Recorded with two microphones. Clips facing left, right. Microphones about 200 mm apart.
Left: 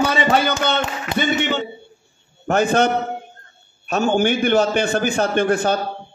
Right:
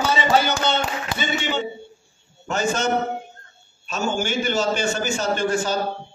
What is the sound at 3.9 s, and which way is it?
A man's voice, 60° left (ahead or behind).